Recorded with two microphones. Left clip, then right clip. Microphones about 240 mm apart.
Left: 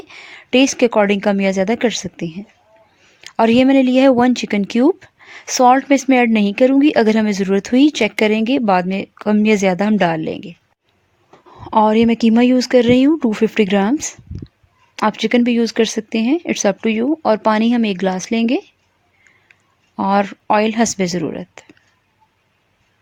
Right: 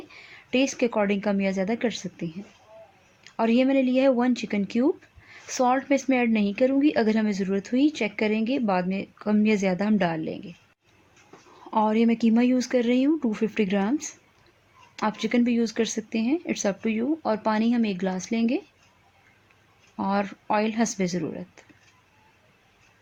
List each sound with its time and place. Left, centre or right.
0.1 s speech: left
11.6 s speech: left
20.0 s speech: left